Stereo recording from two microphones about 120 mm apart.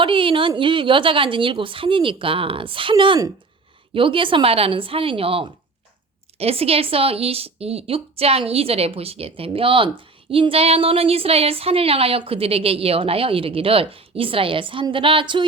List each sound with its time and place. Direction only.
0.0 s a woman's voice: 45° right (ahead or behind)